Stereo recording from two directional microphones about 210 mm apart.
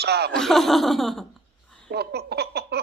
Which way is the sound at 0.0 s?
50° right (ahead or behind).